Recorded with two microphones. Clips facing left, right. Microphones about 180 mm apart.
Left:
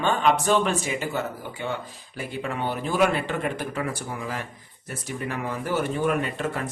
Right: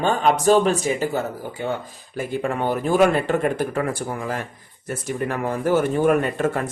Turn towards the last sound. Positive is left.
turn(degrees=-50)  # may be behind; listen again after turning